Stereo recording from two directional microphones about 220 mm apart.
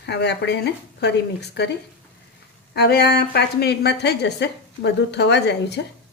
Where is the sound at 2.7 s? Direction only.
50° left (ahead or behind).